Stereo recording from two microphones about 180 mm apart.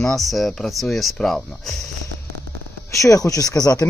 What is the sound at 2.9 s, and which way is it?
Speech, 20° left (ahead or behind).